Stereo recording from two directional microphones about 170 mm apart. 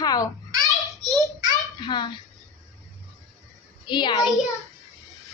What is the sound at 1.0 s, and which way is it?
Speech, centre (ahead or behind).